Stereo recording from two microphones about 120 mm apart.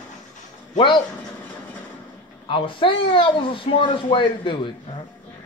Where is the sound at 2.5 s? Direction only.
45° left (ahead or behind).